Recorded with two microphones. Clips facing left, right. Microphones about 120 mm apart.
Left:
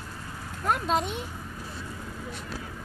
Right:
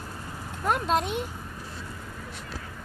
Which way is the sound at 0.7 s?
Centre (ahead or behind).